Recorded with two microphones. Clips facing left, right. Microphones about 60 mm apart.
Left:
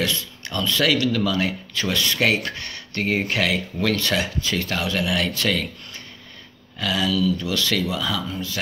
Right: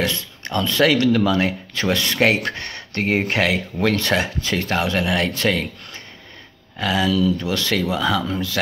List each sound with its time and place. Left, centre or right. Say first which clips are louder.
0.0 s speech: right 2 dB; right
6.8 s speech: right 3 dB; right
8.3 s speech: right 5 dB; right